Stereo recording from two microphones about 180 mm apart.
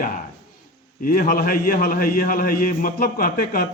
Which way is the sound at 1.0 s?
55° left (ahead or behind).